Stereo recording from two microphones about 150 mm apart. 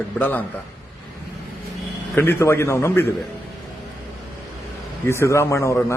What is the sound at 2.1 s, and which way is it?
Speech, 15° left (ahead or behind).